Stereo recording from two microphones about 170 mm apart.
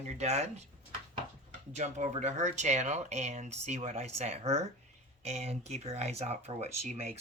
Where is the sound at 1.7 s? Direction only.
45° right (ahead or behind).